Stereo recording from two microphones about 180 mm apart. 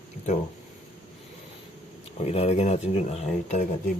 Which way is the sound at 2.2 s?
35° left (ahead or behind).